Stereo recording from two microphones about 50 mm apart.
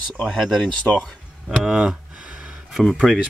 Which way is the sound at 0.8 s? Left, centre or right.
Centre.